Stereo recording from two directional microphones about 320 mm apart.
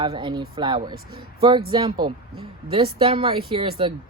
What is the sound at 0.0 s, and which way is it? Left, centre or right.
Speech, centre.